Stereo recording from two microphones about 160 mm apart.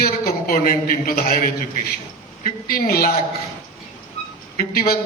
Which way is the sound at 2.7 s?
65° left (ahead or behind).